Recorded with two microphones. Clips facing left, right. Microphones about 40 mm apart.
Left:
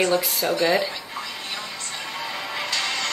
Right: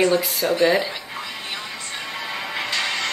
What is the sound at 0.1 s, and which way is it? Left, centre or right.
Speech, centre.